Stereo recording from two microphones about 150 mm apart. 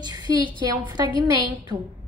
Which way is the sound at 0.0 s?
25° right (ahead or behind).